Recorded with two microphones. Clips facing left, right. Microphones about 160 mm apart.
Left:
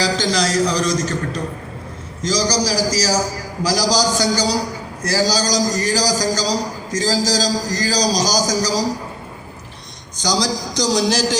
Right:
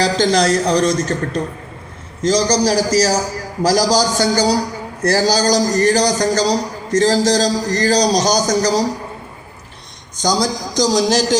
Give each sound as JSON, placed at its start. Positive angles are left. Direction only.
{"t": 0.0, "sound": "speech", "side_deg": -55}
{"t": 2.2, "sound": "a man's voice", "side_deg": -55}
{"t": 10.2, "sound": "speech", "side_deg": -50}